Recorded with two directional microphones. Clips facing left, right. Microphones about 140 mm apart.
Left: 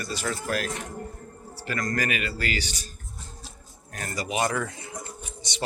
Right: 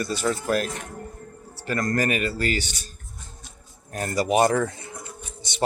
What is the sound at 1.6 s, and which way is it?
Speech, 35° right (ahead or behind).